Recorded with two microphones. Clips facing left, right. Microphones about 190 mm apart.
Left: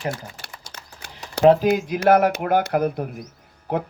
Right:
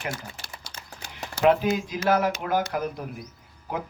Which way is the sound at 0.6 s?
65° left (ahead or behind).